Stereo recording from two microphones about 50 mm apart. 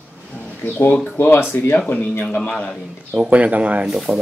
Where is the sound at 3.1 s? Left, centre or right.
Right.